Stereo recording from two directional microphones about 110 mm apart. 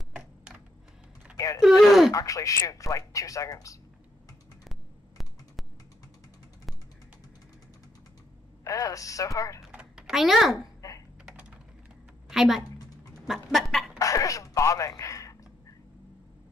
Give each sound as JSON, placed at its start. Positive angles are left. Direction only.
{"t": 1.3, "sound": "a sound", "side_deg": 30}
{"t": 1.6, "sound": "speech", "side_deg": 0}
{"t": 2.1, "sound": "speech", "side_deg": 30}
{"t": 4.6, "sound": "a sound", "side_deg": 0}
{"t": 8.6, "sound": "speech", "side_deg": 30}
{"t": 9.6, "sound": "typing", "side_deg": -10}
{"t": 12.3, "sound": "a woman's voice", "side_deg": -5}
{"t": 13.3, "sound": "chicken", "side_deg": 0}
{"t": 13.9, "sound": "a sound", "side_deg": 30}